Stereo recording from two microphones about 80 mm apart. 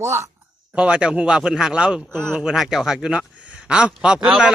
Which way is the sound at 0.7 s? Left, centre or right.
Centre.